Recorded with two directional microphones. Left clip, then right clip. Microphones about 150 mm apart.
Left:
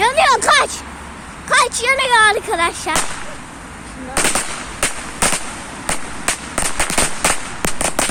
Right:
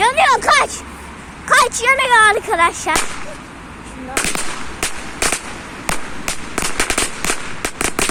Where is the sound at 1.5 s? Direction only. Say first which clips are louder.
Right 2 dB; centre (ahead or behind).